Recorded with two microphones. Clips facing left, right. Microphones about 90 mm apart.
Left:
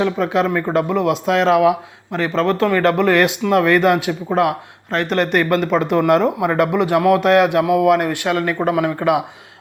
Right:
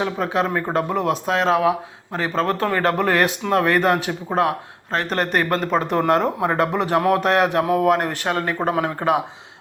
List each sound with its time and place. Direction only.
0.0 s speech: 35° right (ahead or behind)